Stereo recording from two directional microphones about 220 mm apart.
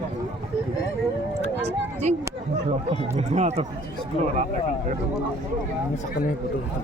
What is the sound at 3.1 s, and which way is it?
Speech, 30° right (ahead or behind).